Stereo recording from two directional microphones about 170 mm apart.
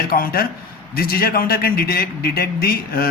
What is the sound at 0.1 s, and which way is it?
A man's voice, 60° left (ahead or behind).